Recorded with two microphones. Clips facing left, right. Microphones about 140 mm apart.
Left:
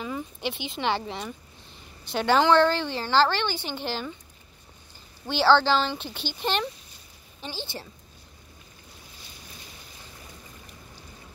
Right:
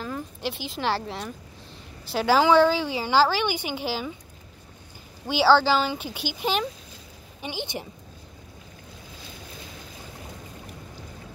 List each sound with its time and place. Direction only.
0.0 s a woman's voice: centre (ahead or behind)
5.2 s a woman's voice: 10° right (ahead or behind)
7.4 s a woman's voice: 15° right (ahead or behind)